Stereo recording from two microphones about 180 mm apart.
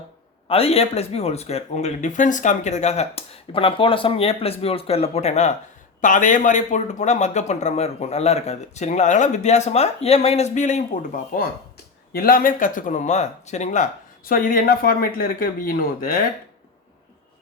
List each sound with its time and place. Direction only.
0.4 s a man's voice: 35° left (ahead or behind); by 16.0 s 50° left (ahead or behind)